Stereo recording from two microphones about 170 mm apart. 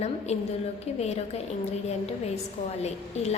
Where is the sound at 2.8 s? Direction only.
40° left (ahead or behind).